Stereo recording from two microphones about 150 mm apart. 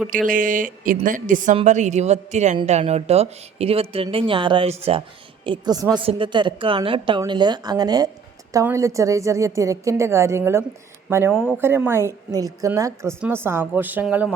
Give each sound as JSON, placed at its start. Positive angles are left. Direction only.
{"t": 0.1, "sound": "speech", "side_deg": -60}
{"t": 5.5, "sound": "a woman's voice", "side_deg": -25}